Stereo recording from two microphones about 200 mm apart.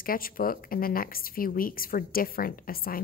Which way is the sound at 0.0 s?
45° left (ahead or behind).